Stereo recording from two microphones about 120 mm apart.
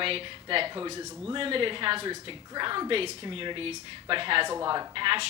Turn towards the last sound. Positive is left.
turn(degrees=-45)  # may be behind; listen again after turning